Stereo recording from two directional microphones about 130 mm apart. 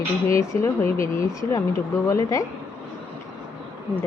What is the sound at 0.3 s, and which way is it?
Speech, 25° left (ahead or behind).